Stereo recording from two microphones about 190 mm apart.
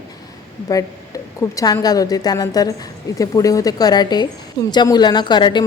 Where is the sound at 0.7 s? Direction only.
20° left (ahead or behind).